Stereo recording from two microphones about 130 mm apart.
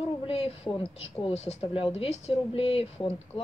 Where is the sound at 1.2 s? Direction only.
55° left (ahead or behind).